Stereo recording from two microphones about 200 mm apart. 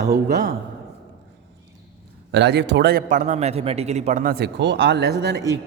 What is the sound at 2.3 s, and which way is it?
A man's voice, 60° right (ahead or behind).